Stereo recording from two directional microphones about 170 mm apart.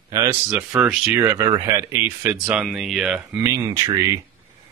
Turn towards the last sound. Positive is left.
turn(degrees=-20)  # may be behind; listen again after turning